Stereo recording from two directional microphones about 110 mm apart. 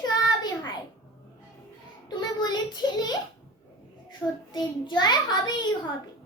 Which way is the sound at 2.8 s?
35° left (ahead or behind).